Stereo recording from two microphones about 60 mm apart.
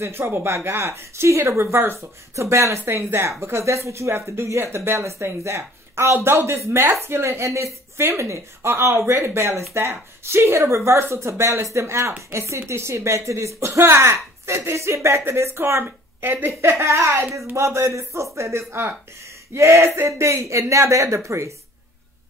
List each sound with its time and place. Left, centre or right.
0.0 s speech: right
2.8 s speech: right
16.8 s a woman's voice: right
17.6 s speech: right